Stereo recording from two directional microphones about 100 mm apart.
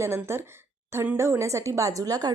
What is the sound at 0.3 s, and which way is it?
Speech, 25° right (ahead or behind).